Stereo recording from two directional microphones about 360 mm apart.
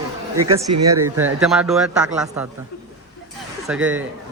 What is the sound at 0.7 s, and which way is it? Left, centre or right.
Speech, centre.